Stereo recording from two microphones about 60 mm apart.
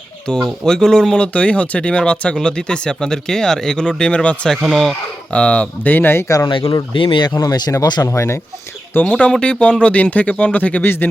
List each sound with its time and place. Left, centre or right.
0.4 s speech: centre
4.6 s speech: centre
5.3 s speech: centre; by 6.2 s left
6.2 s speech: left
9.0 s speech: left
10.8 s speech: left